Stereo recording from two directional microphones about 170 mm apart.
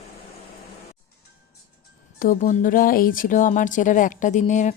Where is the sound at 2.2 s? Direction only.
50° left (ahead or behind).